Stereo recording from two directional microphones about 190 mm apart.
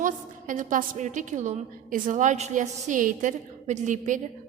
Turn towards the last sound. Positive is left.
turn(degrees=-40)  # may be behind; listen again after turning